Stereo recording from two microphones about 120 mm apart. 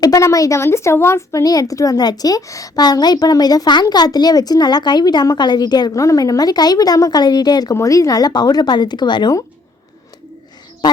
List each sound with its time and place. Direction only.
0.0 s speech: 25° left (ahead or behind)